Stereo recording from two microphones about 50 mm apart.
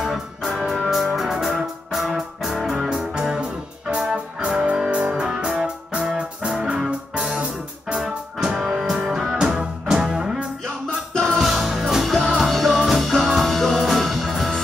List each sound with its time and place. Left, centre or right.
0.0 s music: centre
6.9 s music: right; by 14.5 s centre